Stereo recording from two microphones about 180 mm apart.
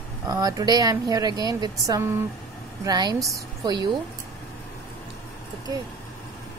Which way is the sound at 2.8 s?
20° right (ahead or behind).